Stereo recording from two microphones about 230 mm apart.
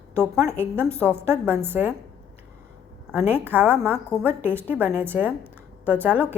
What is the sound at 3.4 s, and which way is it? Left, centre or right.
A woman's voice, centre.